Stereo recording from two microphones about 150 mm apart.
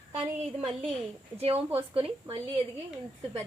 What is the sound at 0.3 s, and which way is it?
A woman's voice, 45° right (ahead or behind).